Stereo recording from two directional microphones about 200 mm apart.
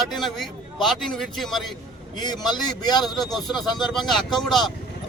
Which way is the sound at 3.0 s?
Centre (ahead or behind).